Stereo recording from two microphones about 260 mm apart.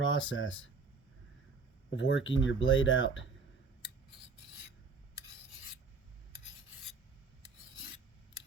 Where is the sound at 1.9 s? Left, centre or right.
Left.